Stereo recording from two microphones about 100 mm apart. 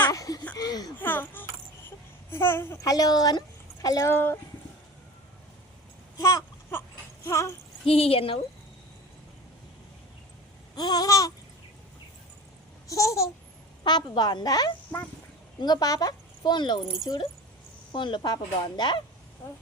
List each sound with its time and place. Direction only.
0.1 s laughter: 35° left (ahead or behind)
0.5 s a sound: 40° left (ahead or behind)
0.9 s a sound: 20° left (ahead or behind)
2.3 s a child's voice: 25° left (ahead or behind)
2.9 s babbling: 40° left (ahead or behind)
3.8 s speech: 30° left (ahead or behind)
4.1 s a child's voice: 20° left (ahead or behind)
6.1 s a child's voice: 30° left (ahead or behind)
7.9 s a woman's voice: 75° left (ahead or behind)
10.8 s babbling: 40° left (ahead or behind)
12.9 s babbling: 30° left (ahead or behind)
13.8 s a woman's voice: 45° left (ahead or behind)
19.4 s a child's voice: 25° left (ahead or behind)